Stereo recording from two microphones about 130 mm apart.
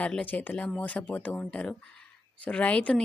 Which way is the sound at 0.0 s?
10° left (ahead or behind).